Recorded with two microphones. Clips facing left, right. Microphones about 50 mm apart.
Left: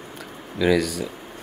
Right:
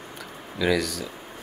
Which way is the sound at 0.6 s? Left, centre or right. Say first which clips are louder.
Left 4 dB; centre.